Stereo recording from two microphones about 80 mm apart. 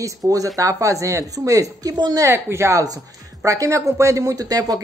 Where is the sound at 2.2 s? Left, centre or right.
Right.